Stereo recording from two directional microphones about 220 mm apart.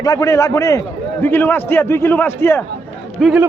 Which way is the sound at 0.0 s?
15° left (ahead or behind).